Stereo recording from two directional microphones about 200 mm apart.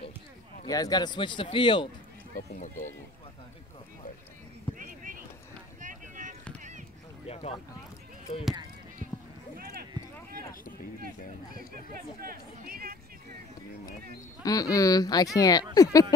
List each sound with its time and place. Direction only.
0.7 s speech: 20° left (ahead or behind)
2.3 s speech: 40° left (ahead or behind)
4.7 s a sound: 45° right (ahead or behind)
5.8 s boat: 40° right (ahead or behind)
7.2 s speech: 30° left (ahead or behind)
12.2 s a sound: 45° right (ahead or behind)
14.4 s speech: 20° left (ahead or behind)